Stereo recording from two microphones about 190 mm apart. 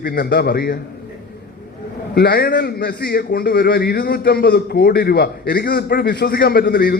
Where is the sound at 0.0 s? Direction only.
55° left (ahead or behind).